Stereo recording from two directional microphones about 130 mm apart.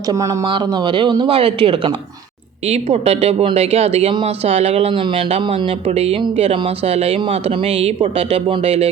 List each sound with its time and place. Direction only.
0.9 s speech: 35° right (ahead or behind)
5.9 s speech: 55° right (ahead or behind)